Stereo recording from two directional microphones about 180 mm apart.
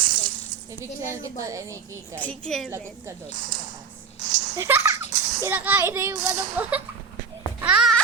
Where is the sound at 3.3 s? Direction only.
45° right (ahead or behind).